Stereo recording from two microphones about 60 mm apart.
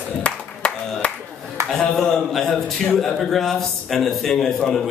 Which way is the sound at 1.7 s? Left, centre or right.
Centre.